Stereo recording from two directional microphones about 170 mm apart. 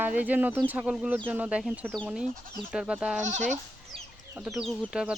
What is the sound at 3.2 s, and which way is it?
Speech, 45° right (ahead or behind).